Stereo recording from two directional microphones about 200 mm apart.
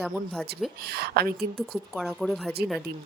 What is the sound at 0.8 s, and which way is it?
Speech, 55° right (ahead or behind).